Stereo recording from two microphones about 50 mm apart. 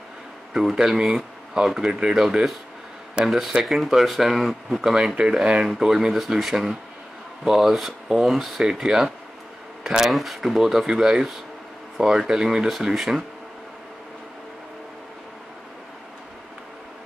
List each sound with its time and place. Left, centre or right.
0.5 s speech: centre